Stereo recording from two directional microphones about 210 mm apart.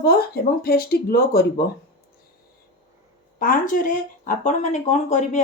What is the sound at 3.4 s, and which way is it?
Speech, 40° left (ahead or behind).